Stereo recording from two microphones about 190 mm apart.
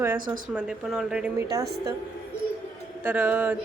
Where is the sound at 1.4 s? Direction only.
20° right (ahead or behind).